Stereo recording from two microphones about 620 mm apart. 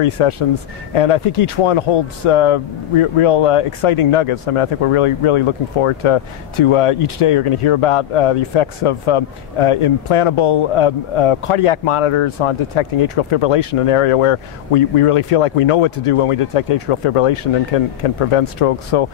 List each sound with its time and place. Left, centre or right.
0.0 s speech: left